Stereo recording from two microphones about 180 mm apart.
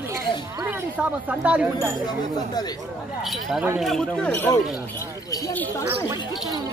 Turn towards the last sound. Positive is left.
turn(degrees=15)  # may be behind; listen again after turning